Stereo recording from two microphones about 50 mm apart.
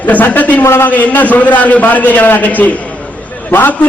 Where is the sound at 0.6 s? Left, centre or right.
Left.